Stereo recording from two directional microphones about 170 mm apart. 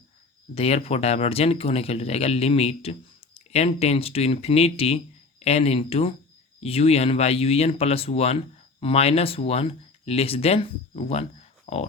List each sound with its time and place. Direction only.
0.5 s speech: 35° left (ahead or behind)